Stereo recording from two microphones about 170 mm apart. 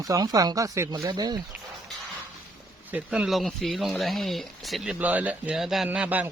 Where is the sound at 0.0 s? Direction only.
20° right (ahead or behind).